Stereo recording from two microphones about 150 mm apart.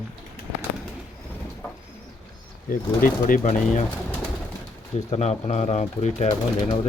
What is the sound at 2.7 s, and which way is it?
Speech, 65° left (ahead or behind).